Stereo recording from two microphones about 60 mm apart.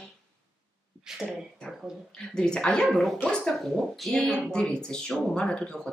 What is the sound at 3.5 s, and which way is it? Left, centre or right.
A woman's voice, centre.